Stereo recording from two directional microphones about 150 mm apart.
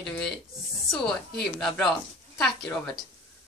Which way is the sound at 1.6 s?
5° left (ahead or behind).